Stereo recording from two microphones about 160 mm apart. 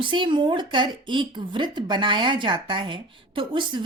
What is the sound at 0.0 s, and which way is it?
Speech, 30° right (ahead or behind).